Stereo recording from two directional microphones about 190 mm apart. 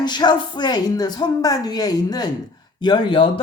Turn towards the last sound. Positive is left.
turn(degrees=25)  # may be behind; listen again after turning